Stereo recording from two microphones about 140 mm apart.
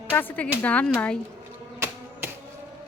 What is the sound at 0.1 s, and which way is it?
Speech, 15° left (ahead or behind).